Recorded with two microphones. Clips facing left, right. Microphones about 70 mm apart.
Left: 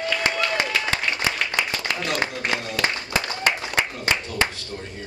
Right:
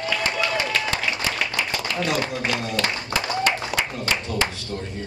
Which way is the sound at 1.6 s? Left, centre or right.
Centre.